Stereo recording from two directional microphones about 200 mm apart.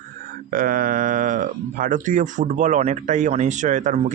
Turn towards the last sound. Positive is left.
turn(degrees=-40)  # may be behind; listen again after turning